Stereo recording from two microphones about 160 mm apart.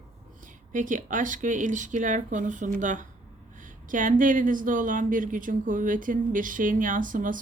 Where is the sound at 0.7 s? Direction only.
55° right (ahead or behind).